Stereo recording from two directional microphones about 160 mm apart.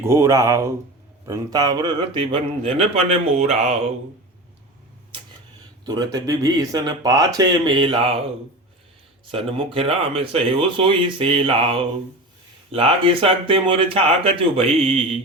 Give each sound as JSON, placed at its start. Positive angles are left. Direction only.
{"t": 0.0, "sound": "speech", "side_deg": -15}
{"t": 5.8, "sound": "speech", "side_deg": -25}
{"t": 9.3, "sound": "speech", "side_deg": -35}